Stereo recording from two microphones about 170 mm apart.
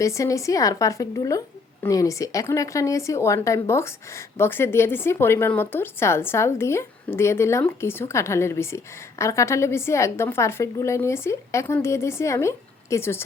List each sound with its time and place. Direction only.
0.0 s a woman's voice: 20° left (ahead or behind)